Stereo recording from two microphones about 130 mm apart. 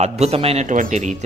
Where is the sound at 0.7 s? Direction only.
70° right (ahead or behind).